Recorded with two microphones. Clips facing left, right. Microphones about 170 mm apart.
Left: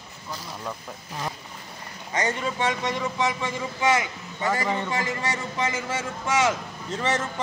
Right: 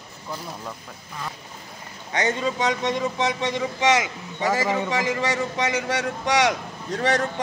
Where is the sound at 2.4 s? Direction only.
20° right (ahead or behind).